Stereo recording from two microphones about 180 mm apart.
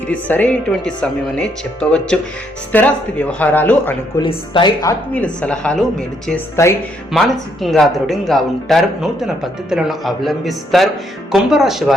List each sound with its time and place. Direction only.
0.1 s speech: 10° left (ahead or behind)
4.2 s speech: 25° left (ahead or behind)
4.8 s speech: 15° left (ahead or behind)